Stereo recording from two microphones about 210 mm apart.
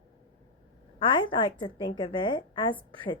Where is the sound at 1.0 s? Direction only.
25° left (ahead or behind).